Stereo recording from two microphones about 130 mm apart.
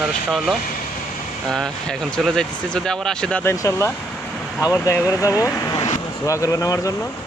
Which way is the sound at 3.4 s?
25° left (ahead or behind).